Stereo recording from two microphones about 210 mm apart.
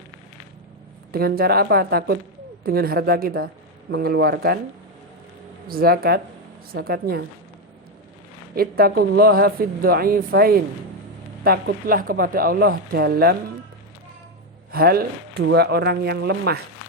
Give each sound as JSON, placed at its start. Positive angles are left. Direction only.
{"t": 1.1, "sound": "a woman's voice", "side_deg": -45}
{"t": 5.6, "sound": "a woman's voice", "side_deg": -45}
{"t": 8.5, "sound": "a woman's voice", "side_deg": -45}
{"t": 14.7, "sound": "a woman's voice", "side_deg": -45}